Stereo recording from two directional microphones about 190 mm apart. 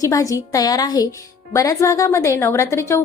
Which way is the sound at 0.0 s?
15° left (ahead or behind).